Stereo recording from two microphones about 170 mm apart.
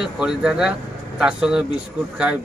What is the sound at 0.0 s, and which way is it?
A man's voice, 5° right (ahead or behind).